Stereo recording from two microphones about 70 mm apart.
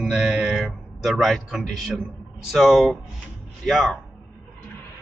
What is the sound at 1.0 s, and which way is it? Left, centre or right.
A man's voice, centre.